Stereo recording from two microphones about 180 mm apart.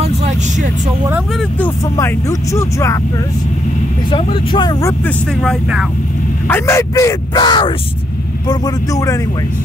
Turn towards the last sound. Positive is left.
turn(degrees=25)  # may be behind; listen again after turning